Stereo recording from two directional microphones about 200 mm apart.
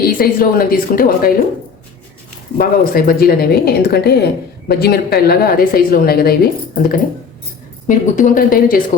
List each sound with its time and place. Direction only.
0.0 s a woman's voice: 45° left (ahead or behind)
2.6 s a woman's voice: 45° left (ahead or behind)
7.9 s a woman's voice: 40° left (ahead or behind)